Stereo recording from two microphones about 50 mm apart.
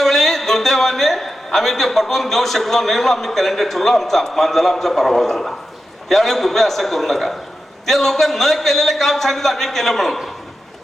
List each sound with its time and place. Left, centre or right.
0.0 s a man's voice: centre